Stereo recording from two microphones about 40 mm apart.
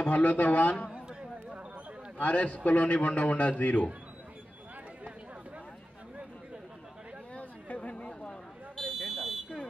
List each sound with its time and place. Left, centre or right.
0.0 s speech: left
0.8 s a sound: right
2.1 s a man's voice: left
7.3 s chatter: left
7.9 s chatter: left
8.7 s fire alarm: centre